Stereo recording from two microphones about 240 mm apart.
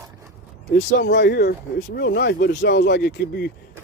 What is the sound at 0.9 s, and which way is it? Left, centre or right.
Speech, left.